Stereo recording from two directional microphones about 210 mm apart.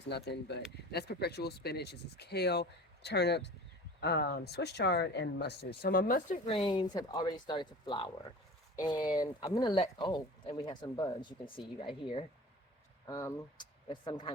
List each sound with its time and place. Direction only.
0.0 s speech: 55° left (ahead or behind); by 14.3 s 25° left (ahead or behind)